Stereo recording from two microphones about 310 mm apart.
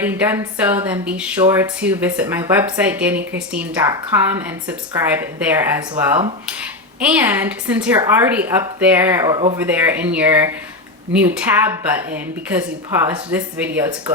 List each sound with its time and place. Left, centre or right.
0.0 s a woman's voice: centre